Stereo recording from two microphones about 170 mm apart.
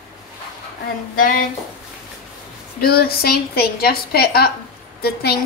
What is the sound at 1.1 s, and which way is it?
Speech, 55° left (ahead or behind).